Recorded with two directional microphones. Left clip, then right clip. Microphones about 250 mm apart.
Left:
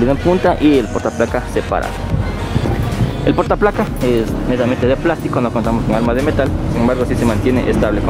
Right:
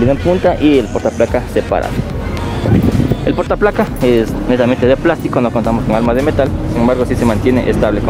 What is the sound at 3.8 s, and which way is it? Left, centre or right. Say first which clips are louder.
Speech: right 4 dB; centre.